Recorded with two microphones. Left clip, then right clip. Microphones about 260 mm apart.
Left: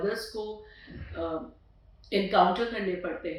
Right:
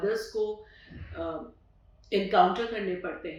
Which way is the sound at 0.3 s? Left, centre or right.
Right.